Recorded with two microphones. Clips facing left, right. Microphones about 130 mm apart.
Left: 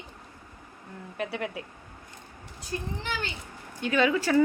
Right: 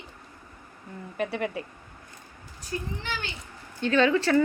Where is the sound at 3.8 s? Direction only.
10° left (ahead or behind).